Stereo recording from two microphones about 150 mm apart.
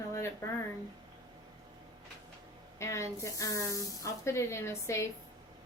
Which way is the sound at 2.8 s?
20° left (ahead or behind).